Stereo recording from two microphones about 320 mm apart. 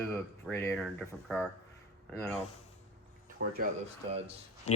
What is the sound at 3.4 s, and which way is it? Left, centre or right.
Speech, right.